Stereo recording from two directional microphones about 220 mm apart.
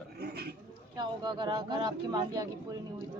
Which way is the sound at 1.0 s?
20° right (ahead or behind).